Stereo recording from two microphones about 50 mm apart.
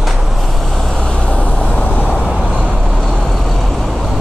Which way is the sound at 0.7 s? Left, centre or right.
Centre.